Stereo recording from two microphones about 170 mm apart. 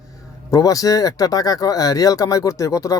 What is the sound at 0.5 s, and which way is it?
Speech, 20° left (ahead or behind).